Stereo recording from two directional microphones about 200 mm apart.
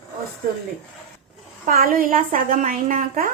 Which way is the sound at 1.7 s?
45° right (ahead or behind).